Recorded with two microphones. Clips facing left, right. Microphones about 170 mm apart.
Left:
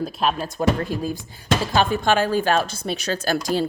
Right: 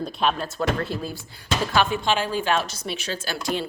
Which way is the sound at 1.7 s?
40° left (ahead or behind).